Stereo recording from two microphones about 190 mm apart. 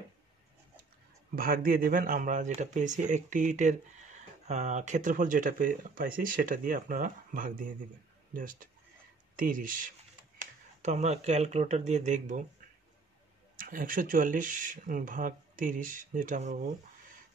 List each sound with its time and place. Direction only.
1.3 s speech: 50° right (ahead or behind)